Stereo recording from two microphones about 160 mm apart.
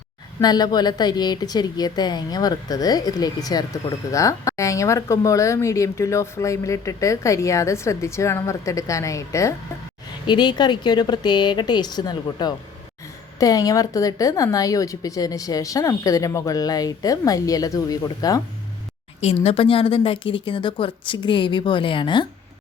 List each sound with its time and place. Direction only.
0.4 s a woman's voice: 25° left (ahead or behind)
19.2 s a woman's voice: 40° left (ahead or behind)